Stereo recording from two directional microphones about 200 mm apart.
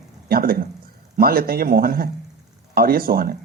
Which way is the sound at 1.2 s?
50° right (ahead or behind).